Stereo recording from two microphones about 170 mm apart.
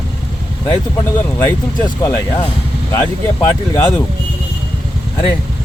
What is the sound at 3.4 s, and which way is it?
Speech, 20° left (ahead or behind).